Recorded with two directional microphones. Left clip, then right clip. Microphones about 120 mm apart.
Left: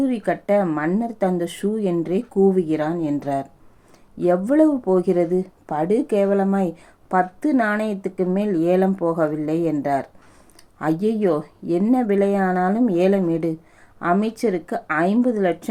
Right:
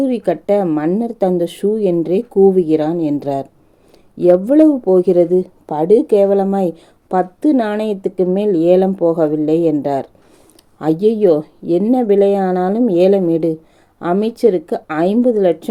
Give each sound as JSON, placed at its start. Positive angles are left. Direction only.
{"t": 0.0, "sound": "speech", "side_deg": -35}